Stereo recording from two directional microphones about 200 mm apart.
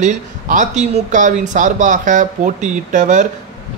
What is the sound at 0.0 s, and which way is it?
Speech, 40° right (ahead or behind).